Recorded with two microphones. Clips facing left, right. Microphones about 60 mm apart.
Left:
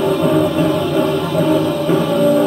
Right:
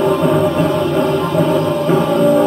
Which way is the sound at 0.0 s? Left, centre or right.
Centre.